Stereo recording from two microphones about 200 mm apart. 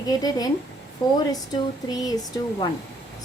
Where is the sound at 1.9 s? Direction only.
20° left (ahead or behind).